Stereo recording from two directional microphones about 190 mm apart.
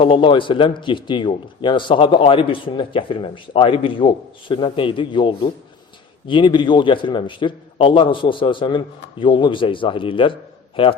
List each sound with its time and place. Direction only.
0.0 s a man's voice: 25° left (ahead or behind)